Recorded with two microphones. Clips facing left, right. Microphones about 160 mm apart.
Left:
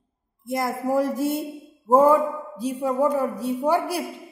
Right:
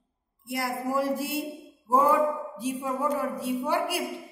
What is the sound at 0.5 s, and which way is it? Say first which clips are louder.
Speech: left 5 dB; 45° left (ahead or behind).